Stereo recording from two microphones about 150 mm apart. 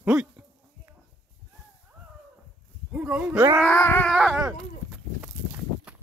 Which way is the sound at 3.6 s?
10° left (ahead or behind).